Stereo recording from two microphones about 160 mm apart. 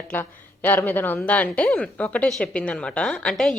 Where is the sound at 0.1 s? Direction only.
10° left (ahead or behind).